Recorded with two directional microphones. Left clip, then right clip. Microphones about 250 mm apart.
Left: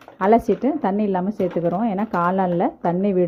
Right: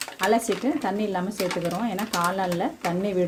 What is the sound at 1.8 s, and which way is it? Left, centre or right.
Speech, centre.